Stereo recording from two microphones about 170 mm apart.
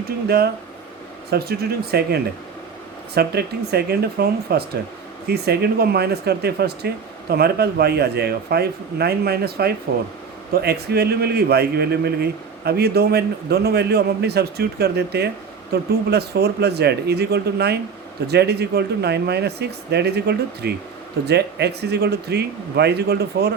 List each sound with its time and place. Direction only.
0.3 s a man's voice: 70° right (ahead or behind)